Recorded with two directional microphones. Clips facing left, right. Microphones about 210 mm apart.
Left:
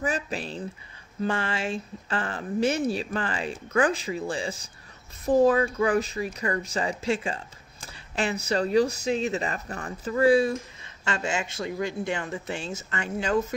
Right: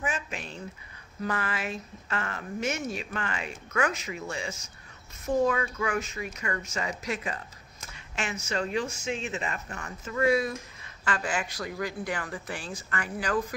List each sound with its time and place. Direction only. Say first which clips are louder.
0.0 s speech: left 5 dB; 35° left (ahead or behind)